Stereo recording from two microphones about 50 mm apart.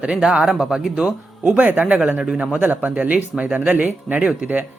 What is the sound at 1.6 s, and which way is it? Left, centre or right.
Speech, right.